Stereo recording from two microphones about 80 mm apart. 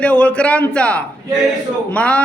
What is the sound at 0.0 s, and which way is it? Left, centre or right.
A man's voice, centre.